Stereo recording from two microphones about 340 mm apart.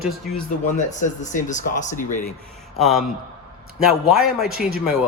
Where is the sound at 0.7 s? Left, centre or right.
Left.